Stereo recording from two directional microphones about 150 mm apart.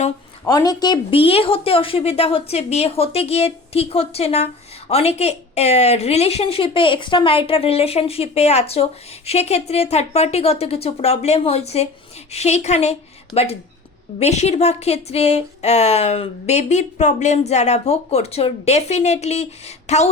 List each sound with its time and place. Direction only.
0.4 s a woman's voice: 25° left (ahead or behind); by 20.1 s 45° left (ahead or behind)